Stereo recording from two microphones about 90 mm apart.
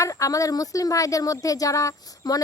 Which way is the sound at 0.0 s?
40° left (ahead or behind).